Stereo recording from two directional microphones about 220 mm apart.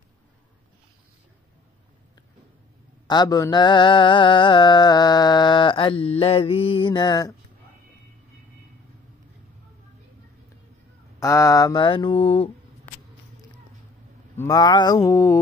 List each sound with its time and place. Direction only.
3.1 s mantra: 20° left (ahead or behind)
11.1 s mantra: 15° left (ahead or behind)
14.3 s a sound: 15° left (ahead or behind)